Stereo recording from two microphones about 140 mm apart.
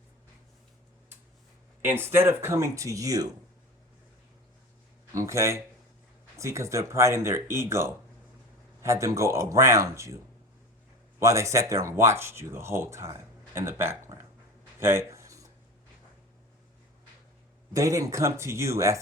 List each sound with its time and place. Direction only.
1.8 s speech: 15° right (ahead or behind)
5.1 s speech: 20° right (ahead or behind)
11.2 s speech: 20° right (ahead or behind)
14.8 s a sound: 20° right (ahead or behind)
17.7 s speech: 25° right (ahead or behind)